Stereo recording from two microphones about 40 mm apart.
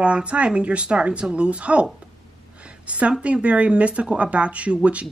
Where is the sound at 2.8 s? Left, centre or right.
Right.